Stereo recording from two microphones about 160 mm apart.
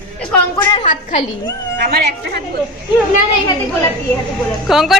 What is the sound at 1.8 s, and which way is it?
Speech, 80° right.